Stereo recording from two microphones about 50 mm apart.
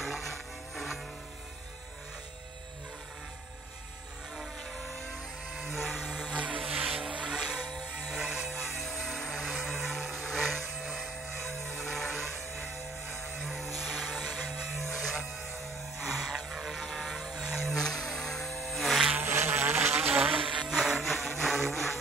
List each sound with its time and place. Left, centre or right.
0.0 s music: centre
5.5 s a sound: centre
6.3 s music: right
6.9 s vehicle: centre
7.8 s music: centre
9.2 s vehicle: centre
11.7 s music: centre
16.1 s vehicle: centre
17.4 s vehicle: centre
17.6 s a sound: centre
19.2 s insect: right
20.0 s vehicle: right
20.2 s music: right
20.7 s music: centre